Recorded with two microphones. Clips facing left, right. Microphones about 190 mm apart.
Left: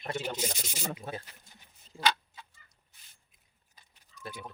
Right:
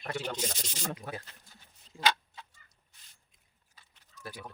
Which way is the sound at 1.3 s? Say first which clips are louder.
Even; 15° left (ahead or behind).